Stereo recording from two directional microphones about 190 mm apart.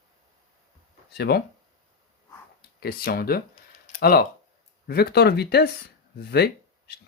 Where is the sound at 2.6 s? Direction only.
55° left (ahead or behind).